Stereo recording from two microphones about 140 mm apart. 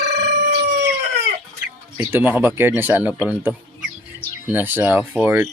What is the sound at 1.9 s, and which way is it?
Speech, 15° right (ahead or behind).